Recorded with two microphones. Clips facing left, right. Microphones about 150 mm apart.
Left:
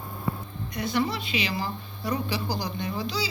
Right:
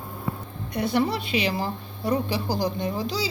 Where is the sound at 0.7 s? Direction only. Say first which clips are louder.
Right 4 dB; 60° right (ahead or behind); by 3.2 s 45° right (ahead or behind).